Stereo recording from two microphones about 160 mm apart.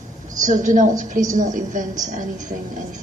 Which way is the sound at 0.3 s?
50° right (ahead or behind).